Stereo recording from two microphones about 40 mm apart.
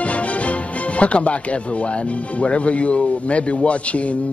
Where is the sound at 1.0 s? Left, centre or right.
Left.